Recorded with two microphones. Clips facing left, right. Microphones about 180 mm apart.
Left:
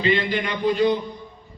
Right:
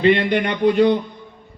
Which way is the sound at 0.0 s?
65° right (ahead or behind).